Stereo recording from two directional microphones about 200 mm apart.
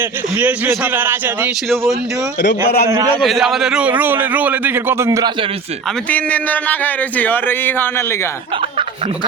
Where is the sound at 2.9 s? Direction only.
15° right (ahead or behind).